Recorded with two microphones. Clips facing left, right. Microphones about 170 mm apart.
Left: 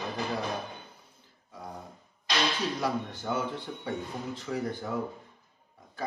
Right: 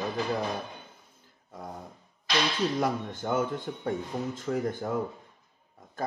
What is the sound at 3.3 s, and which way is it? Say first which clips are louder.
Speech: right 5 dB; 50° right (ahead or behind).